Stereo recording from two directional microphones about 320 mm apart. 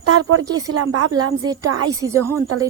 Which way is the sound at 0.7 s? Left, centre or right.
Right.